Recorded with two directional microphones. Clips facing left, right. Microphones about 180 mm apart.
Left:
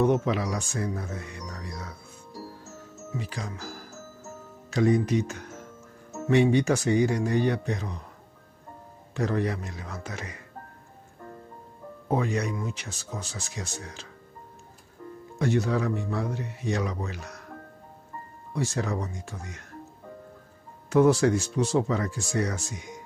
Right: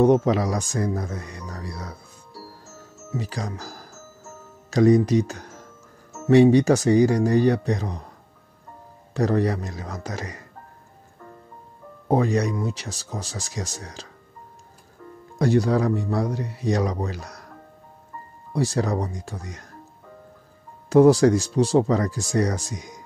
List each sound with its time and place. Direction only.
0.0 s speech: 35° right (ahead or behind)
3.2 s speech: 40° right (ahead or behind)
9.1 s speech: 35° right (ahead or behind)
12.1 s speech: 35° right (ahead or behind)
15.3 s speech: 35° right (ahead or behind)
18.5 s speech: 35° right (ahead or behind)
20.9 s speech: 35° right (ahead or behind)